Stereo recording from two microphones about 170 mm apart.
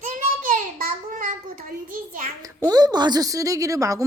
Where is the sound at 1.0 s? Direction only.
50° right (ahead or behind).